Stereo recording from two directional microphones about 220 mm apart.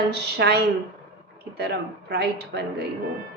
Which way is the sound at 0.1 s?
50° right (ahead or behind).